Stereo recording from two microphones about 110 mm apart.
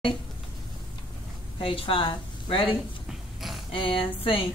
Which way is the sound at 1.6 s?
55° left (ahead or behind).